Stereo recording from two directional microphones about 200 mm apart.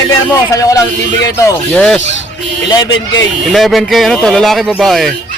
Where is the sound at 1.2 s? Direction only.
15° left (ahead or behind).